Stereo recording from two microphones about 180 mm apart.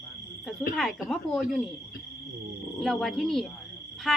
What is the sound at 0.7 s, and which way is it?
Speech, 5° left (ahead or behind).